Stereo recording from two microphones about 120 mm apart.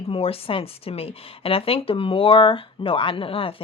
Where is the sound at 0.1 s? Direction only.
50° left (ahead or behind).